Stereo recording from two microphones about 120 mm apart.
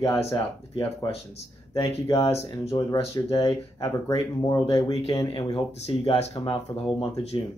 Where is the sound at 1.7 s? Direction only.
55° left (ahead or behind).